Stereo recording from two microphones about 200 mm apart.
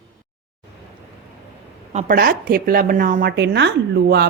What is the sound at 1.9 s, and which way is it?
A woman's voice, 40° right (ahead or behind).